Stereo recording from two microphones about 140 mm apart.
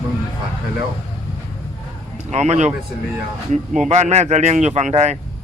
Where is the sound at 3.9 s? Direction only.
55° right (ahead or behind).